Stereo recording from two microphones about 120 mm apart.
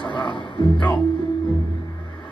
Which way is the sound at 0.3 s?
45° left (ahead or behind).